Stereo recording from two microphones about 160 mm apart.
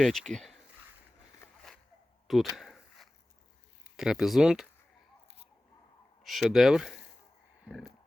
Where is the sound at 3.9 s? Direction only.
5° right (ahead or behind).